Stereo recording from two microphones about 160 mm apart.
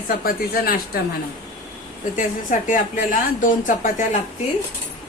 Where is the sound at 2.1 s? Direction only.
55° left (ahead or behind).